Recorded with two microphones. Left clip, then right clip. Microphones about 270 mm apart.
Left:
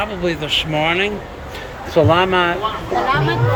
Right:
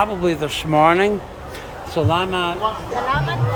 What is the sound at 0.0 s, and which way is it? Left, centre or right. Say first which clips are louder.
Speech: right 2 dB; centre.